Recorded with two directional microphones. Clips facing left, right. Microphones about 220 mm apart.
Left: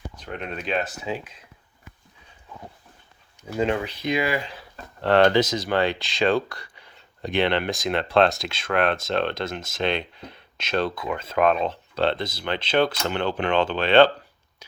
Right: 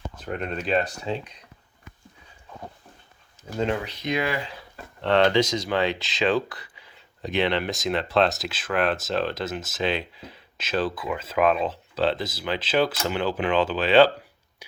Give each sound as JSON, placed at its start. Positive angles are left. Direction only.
{"t": 0.3, "sound": "speech", "side_deg": 0}
{"t": 4.1, "sound": "speech", "side_deg": 10}
{"t": 5.0, "sound": "speech", "side_deg": 45}
{"t": 5.7, "sound": "speech", "side_deg": 0}
{"t": 14.6, "sound": "whispering", "side_deg": -15}